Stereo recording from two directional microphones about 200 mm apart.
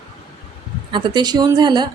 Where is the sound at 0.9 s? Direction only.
20° right (ahead or behind).